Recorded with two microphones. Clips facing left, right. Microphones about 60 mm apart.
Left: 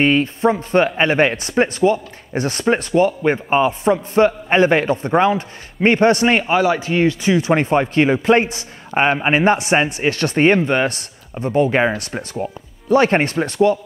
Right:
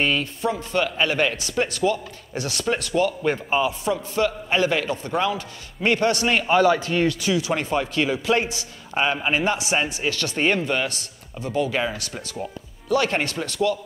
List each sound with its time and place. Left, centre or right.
0.0 s speech: left
6.4 s speech: centre
7.3 s speech: left
12.4 s speech: left